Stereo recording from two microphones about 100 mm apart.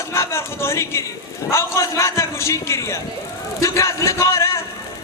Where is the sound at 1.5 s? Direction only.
30° left (ahead or behind).